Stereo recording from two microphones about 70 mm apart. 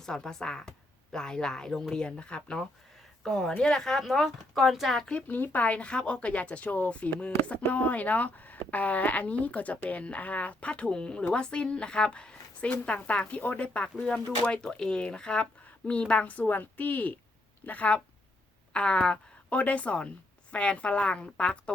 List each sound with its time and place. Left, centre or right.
0.0 s speech: centre
5.0 s a woman's voice: left